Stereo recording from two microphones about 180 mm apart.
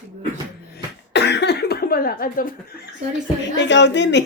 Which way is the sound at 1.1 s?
70° left (ahead or behind).